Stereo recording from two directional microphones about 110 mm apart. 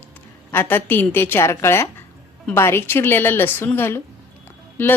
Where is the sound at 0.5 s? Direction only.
20° left (ahead or behind).